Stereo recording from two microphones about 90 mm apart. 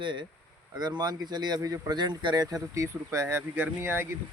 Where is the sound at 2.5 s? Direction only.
35° right (ahead or behind).